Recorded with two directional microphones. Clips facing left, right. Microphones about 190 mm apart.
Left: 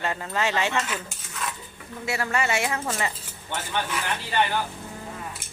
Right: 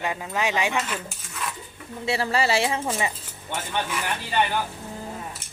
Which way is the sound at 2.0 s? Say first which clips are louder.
Right 3 dB; 30° right (ahead or behind).